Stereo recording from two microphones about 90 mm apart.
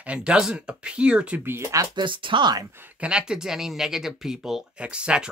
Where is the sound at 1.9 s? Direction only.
65° right (ahead or behind).